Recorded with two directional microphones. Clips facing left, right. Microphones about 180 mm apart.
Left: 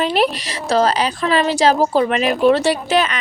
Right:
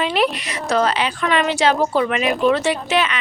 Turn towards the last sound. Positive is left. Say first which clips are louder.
# left 2 dB
turn(degrees=40)  # may be behind; listen again after turning